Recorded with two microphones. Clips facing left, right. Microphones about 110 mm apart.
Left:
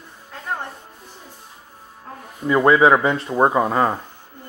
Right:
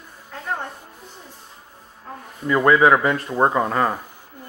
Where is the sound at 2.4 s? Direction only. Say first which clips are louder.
Left 1 dB; 15° left (ahead or behind).